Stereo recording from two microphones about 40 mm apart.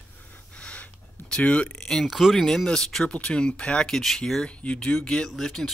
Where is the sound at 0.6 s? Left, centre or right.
Left.